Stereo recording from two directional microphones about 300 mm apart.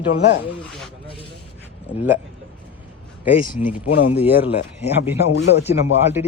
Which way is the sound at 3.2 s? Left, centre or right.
Centre.